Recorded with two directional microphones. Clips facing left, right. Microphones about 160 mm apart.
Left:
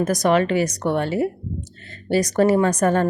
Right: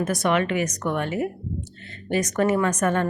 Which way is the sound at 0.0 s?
40° left (ahead or behind).